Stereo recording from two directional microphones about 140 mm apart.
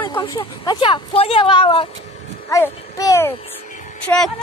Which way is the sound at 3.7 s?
65° left (ahead or behind).